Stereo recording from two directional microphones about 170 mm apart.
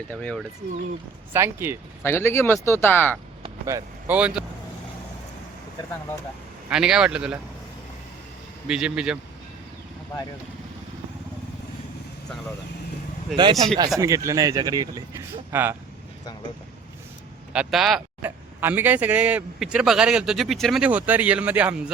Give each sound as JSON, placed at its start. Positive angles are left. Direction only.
{"t": 0.1, "sound": "speech", "side_deg": 5}
{"t": 1.3, "sound": "speech", "side_deg": -15}
{"t": 2.0, "sound": "speech", "side_deg": 15}
{"t": 3.4, "sound": "speech", "side_deg": -20}
{"t": 6.7, "sound": "speech", "side_deg": -5}
{"t": 8.6, "sound": "speech", "side_deg": -5}
{"t": 13.3, "sound": "speech", "side_deg": -25}
{"t": 17.5, "sound": "speech", "side_deg": -5}